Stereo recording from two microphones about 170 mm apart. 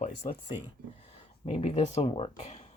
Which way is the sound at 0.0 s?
45° left (ahead or behind).